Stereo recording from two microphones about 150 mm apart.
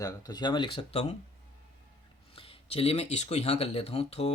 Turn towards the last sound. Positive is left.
turn(degrees=45)  # may be behind; listen again after turning